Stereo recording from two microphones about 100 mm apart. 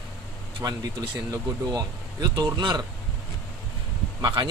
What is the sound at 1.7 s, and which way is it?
Speech, 40° right (ahead or behind).